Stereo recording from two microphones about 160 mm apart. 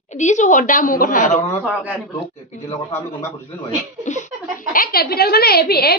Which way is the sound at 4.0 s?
50° left (ahead or behind).